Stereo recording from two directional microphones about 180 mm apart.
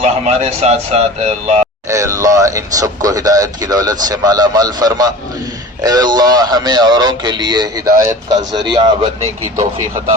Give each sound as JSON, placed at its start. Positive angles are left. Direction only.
{"t": 0.0, "sound": "a man's voice", "side_deg": -35}
{"t": 1.9, "sound": "speech", "side_deg": -15}